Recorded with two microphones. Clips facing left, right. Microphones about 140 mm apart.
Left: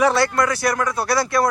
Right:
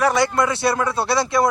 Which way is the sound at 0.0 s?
15° right (ahead or behind).